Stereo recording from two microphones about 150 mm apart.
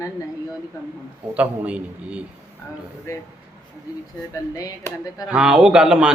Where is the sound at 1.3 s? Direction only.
10° right (ahead or behind).